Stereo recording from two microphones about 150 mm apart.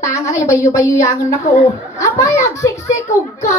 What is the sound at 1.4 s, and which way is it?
Speech, 50° left (ahead or behind).